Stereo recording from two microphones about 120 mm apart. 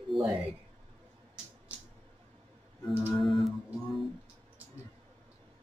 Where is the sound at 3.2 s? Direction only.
Centre (ahead or behind).